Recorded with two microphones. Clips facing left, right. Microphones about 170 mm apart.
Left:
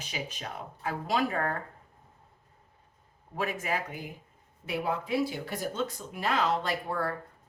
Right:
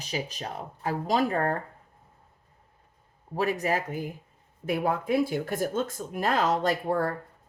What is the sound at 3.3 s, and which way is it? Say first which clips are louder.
Speech: right 5 dB; 40° right (ahead or behind).